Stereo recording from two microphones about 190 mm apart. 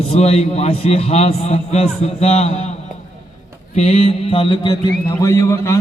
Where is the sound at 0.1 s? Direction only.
35° left (ahead or behind).